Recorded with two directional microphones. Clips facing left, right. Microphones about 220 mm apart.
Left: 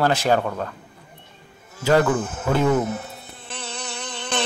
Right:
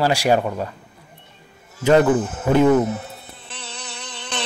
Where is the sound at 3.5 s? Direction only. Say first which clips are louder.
Left 4 dB; 50° left (ahead or behind).